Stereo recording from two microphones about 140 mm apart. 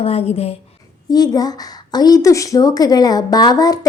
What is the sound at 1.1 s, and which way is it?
Speech, 30° left (ahead or behind).